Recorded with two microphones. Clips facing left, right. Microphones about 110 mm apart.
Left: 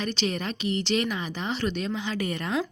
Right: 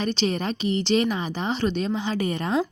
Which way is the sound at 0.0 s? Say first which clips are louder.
Right 4 dB; 30° right (ahead or behind).